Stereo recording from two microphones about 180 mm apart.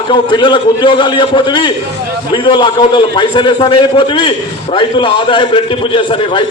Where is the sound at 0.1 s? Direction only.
25° left (ahead or behind).